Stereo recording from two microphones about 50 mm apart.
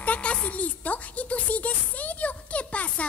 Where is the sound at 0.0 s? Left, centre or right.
Left.